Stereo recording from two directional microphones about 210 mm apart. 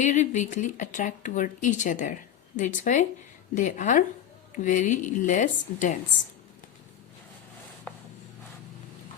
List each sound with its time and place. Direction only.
0.0 s speech: 35° left (ahead or behind)